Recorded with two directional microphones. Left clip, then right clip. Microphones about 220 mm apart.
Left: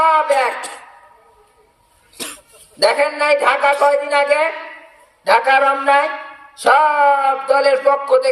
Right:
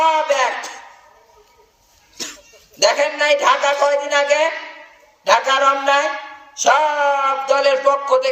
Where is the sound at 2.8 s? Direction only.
35° left (ahead or behind).